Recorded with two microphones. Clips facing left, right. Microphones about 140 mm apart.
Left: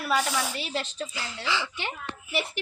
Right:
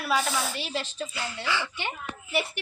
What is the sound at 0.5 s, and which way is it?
Speech, 5° right (ahead or behind).